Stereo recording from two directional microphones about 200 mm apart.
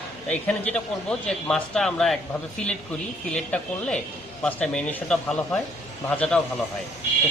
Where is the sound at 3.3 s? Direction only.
5° left (ahead or behind).